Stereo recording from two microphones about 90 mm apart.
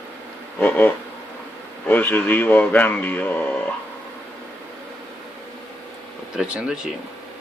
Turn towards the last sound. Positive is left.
turn(degrees=-10)  # may be behind; listen again after turning